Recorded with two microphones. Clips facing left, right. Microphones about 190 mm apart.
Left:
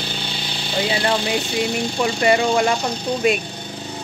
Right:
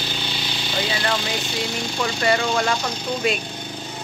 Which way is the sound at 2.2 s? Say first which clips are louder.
Left 4 dB; 15° left (ahead or behind).